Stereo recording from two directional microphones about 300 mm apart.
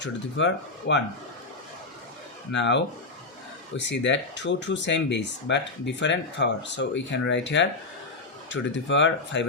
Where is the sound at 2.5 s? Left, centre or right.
Left.